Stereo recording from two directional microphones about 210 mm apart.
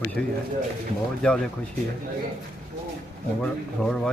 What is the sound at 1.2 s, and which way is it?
Speech, 5° left (ahead or behind).